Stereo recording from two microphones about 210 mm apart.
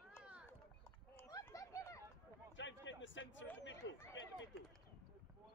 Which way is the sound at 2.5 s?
60° left (ahead or behind).